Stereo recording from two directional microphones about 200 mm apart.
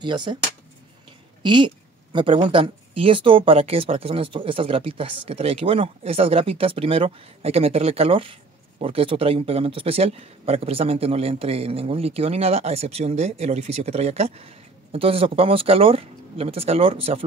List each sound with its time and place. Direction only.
0.0 s speech: 25° right (ahead or behind)
1.4 s speech: 25° right (ahead or behind)